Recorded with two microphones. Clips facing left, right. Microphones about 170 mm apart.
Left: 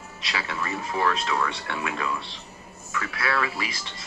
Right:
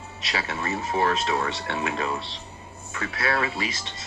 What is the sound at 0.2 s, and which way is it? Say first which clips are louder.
Speech: right 1 dB; 25° right (ahead or behind).